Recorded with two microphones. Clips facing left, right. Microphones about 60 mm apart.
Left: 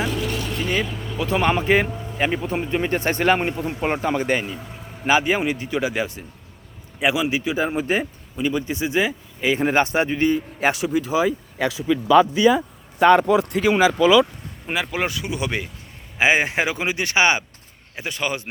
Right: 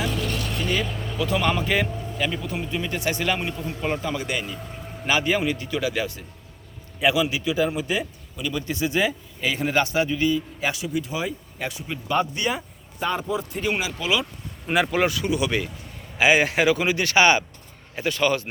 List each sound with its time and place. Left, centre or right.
0.1 s vehicle: centre
1.2 s a man's voice: left
5.0 s a man's voice: left
8.4 s a man's voice: left
10.8 s speech: left
13.0 s a man's voice: left
14.7 s speech: centre
15.3 s a man's voice: left